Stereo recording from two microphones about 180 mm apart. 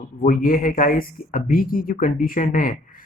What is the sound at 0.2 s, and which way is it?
Speech, 50° left (ahead or behind).